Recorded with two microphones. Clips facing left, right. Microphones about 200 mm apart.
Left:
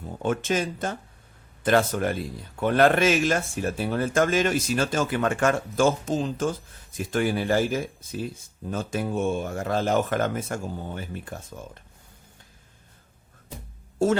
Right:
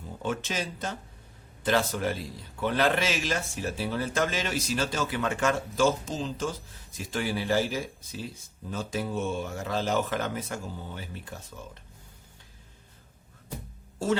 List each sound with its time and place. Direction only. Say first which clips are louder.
0.2 s speech: left 6 dB; 50° left (ahead or behind)